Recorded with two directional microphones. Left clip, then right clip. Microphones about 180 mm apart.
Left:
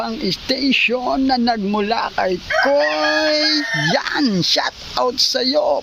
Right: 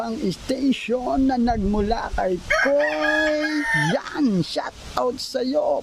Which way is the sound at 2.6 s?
20° left (ahead or behind).